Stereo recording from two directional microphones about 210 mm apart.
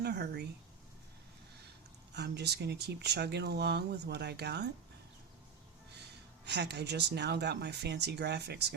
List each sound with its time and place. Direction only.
0.0 s speech: 50° right (ahead or behind)
2.1 s speech: 50° right (ahead or behind)
6.4 s speech: 55° right (ahead or behind)